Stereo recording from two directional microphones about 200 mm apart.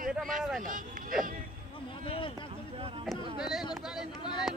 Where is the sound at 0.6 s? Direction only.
40° right (ahead or behind).